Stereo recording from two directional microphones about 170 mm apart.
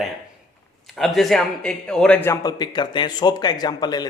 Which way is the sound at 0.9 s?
Centre (ahead or behind).